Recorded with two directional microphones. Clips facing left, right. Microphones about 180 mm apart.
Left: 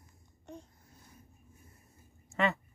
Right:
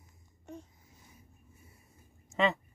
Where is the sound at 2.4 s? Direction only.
15° right (ahead or behind).